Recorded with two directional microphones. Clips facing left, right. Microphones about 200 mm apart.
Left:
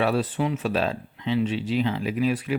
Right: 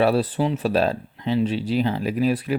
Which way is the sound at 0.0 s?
35° right (ahead or behind).